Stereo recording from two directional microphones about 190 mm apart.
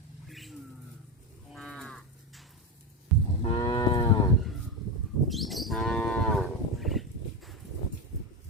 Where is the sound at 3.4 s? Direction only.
25° left (ahead or behind).